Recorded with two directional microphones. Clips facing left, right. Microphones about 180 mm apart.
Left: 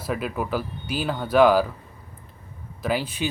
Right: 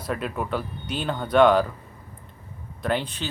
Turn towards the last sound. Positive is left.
turn(degrees=5)  # may be behind; listen again after turning